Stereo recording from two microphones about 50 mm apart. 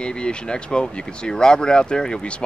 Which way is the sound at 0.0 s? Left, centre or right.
Centre.